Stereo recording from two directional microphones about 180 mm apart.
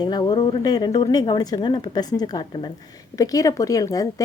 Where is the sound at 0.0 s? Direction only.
25° left (ahead or behind).